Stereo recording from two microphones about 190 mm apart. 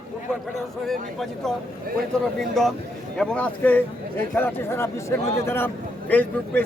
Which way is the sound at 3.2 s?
5° left (ahead or behind).